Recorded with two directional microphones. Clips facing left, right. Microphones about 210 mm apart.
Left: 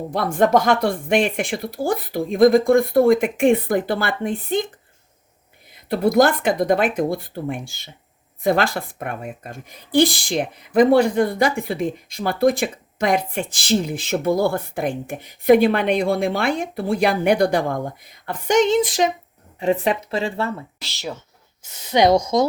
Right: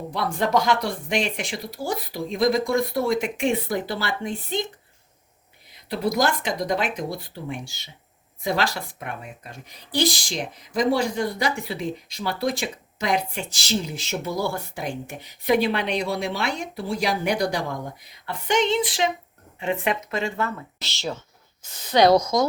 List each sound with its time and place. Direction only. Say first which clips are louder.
0.1 s speech: left 6 dB; 50° left (ahead or behind)
5.9 s speech: left 7 dB; 50° left (ahead or behind); by 20.7 s 30° left (ahead or behind)
21.8 s speech: left 1 dB; 15° left (ahead or behind)